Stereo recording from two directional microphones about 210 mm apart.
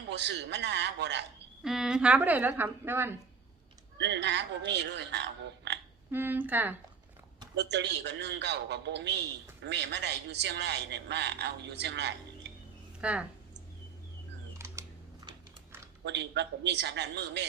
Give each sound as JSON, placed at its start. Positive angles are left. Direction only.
{"t": 0.1, "sound": "speech", "side_deg": -55}
{"t": 1.6, "sound": "a woman's voice", "side_deg": 0}
{"t": 3.9, "sound": "speech", "side_deg": -55}
{"t": 6.1, "sound": "a woman's voice", "side_deg": -10}
{"t": 7.5, "sound": "a man's voice", "side_deg": -55}
{"t": 13.0, "sound": "speech", "side_deg": -5}
{"t": 14.6, "sound": "typing", "side_deg": -15}
{"t": 16.0, "sound": "speech", "side_deg": -55}